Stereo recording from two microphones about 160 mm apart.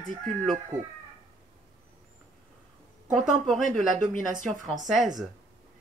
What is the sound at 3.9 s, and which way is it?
Speech, 55° right (ahead or behind).